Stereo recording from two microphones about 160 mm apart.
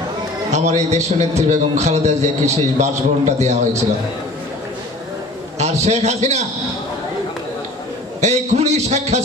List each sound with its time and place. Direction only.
0.5 s a man's voice: 45° right (ahead or behind)
5.6 s a man's voice: 45° right (ahead or behind)
8.2 s a man's voice: 45° right (ahead or behind)